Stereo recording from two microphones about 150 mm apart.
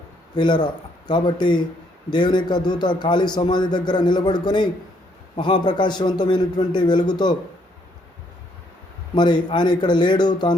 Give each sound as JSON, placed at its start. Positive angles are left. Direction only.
{"t": 0.3, "sound": "a man's voice", "side_deg": 30}
{"t": 9.1, "sound": "a man's voice", "side_deg": 30}